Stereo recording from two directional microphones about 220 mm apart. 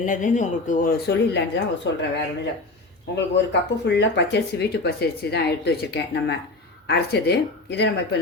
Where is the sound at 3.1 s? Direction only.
50° left (ahead or behind).